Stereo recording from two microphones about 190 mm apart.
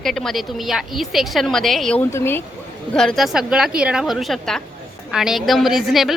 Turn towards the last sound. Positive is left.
turn(degrees=0)  # may be behind; listen again after turning